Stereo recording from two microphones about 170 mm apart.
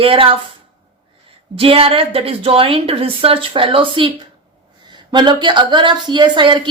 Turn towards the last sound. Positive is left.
turn(degrees=-25)  # may be behind; listen again after turning